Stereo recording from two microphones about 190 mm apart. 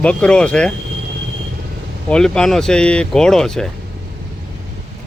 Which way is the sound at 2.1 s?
5° left (ahead or behind).